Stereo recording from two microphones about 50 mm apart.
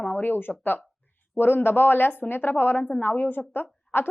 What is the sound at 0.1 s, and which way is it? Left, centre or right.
A woman's voice, left.